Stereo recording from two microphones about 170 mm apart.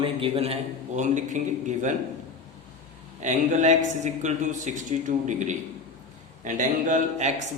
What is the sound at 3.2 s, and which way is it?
A man's voice, 45° right (ahead or behind).